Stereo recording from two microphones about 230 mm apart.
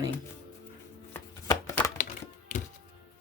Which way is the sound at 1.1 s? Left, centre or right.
Centre.